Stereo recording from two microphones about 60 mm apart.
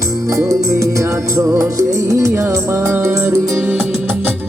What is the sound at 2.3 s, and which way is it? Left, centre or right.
Music, right.